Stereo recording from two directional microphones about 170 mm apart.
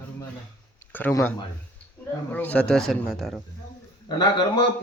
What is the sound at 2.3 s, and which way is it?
Speech, 10° left (ahead or behind).